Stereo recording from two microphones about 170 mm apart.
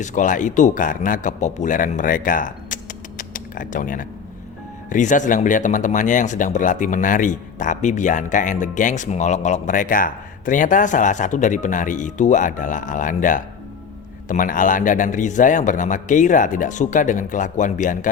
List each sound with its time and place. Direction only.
0.0 s speech: 45° left (ahead or behind)
3.2 s a sound: 50° left (ahead or behind)
4.9 s speech: 50° left (ahead or behind)